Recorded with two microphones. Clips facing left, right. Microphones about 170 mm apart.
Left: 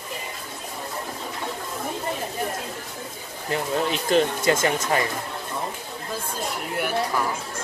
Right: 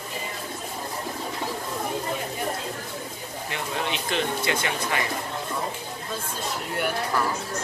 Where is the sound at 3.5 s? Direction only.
40° left (ahead or behind).